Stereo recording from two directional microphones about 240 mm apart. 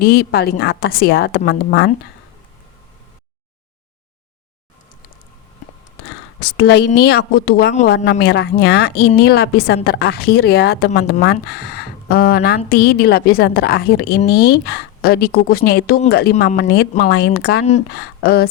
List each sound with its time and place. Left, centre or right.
0.0 s a woman's voice: left
6.4 s a woman's voice: left